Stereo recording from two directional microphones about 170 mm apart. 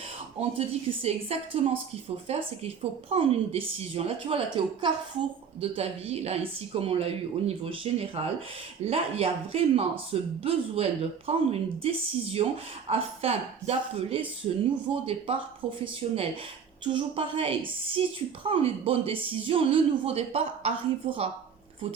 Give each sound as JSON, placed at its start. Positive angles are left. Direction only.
{"t": 0.3, "sound": "a woman's voice", "side_deg": -35}